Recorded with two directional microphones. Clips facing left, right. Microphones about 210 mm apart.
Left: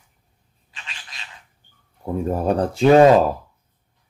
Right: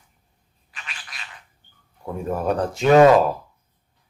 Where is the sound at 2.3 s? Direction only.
30° left (ahead or behind).